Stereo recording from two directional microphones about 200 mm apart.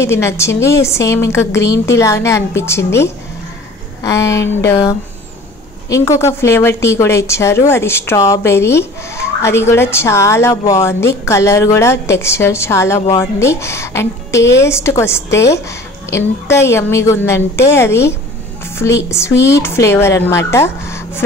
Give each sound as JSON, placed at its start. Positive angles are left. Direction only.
{"t": 0.0, "sound": "a woman's voice", "side_deg": 15}